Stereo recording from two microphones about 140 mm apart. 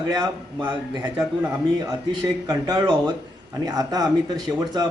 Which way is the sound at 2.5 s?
30° right (ahead or behind).